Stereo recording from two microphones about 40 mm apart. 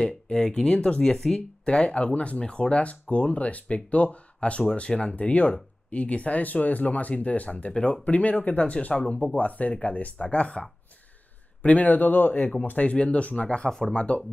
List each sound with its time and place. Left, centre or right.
0.0 s speech: left
1.1 s speech: centre
1.6 s speech: left
5.1 s speech: left
10.1 s speech: left
11.6 s speech: left
13.7 s speech: centre
13.9 s speech: left